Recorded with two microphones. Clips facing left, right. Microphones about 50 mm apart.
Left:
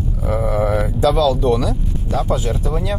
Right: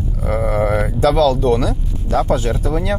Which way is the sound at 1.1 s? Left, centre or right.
Right.